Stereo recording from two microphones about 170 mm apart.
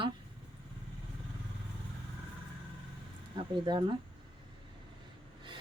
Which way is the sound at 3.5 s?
25° right (ahead or behind).